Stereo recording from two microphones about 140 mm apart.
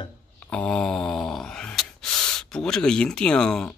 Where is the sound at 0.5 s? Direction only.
5° left (ahead or behind).